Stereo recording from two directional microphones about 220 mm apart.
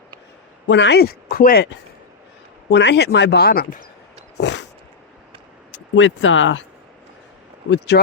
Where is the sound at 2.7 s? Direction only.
50° left (ahead or behind).